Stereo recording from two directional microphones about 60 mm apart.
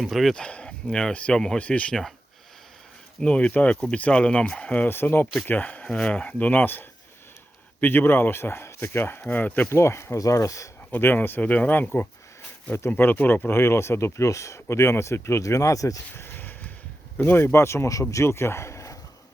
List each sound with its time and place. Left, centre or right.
0.0 s speech: centre
0.3 s speech: centre
1.6 s speech: left
3.2 s speech: centre
4.9 s speech: left
9.6 s speech: left
10.2 s speech: left
10.9 s speech: left
16.1 s a sound: left
17.2 s speech: left